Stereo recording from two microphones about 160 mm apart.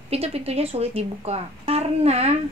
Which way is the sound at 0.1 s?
40° right (ahead or behind).